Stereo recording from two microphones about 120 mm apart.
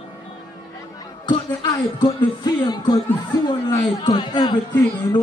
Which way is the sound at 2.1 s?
40° left (ahead or behind).